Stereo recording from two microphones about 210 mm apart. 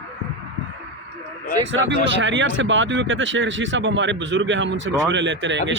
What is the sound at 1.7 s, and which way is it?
Speech, 60° right (ahead or behind).